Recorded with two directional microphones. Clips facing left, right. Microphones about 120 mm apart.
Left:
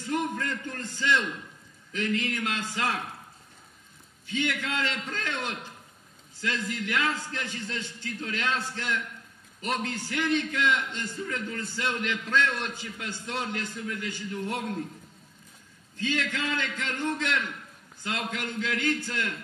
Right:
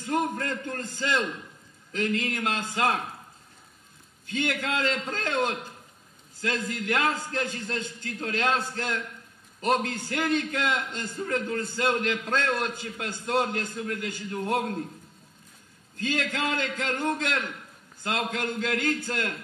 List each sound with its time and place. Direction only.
0.0 s a man's voice: 40° right (ahead or behind)
4.3 s a man's voice: 45° right (ahead or behind)
16.0 s a man's voice: 45° right (ahead or behind)